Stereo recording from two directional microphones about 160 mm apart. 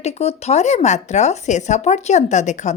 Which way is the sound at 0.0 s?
40° left (ahead or behind).